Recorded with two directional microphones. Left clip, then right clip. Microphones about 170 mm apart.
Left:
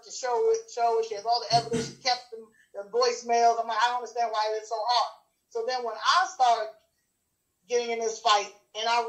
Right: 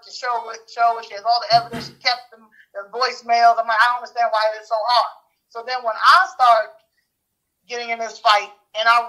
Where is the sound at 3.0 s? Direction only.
50° right (ahead or behind).